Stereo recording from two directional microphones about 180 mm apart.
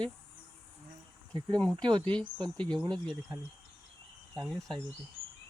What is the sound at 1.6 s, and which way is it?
Speech, 5° left (ahead or behind).